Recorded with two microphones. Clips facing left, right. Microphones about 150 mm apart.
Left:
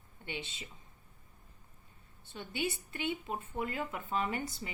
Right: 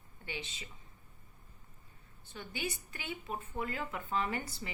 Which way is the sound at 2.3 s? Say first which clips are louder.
Left 3 dB; 25° left (ahead or behind).